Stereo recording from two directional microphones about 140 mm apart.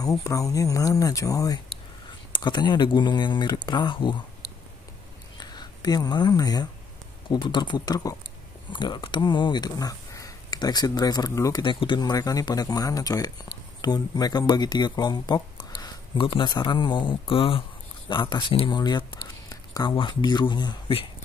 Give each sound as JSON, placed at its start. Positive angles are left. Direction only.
{"t": 0.0, "sound": "speech", "side_deg": 25}
{"t": 5.4, "sound": "speech", "side_deg": 30}
{"t": 11.6, "sound": "speech", "side_deg": 35}